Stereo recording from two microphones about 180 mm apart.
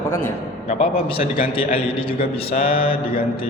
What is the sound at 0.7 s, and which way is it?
A man's voice, 30° left (ahead or behind).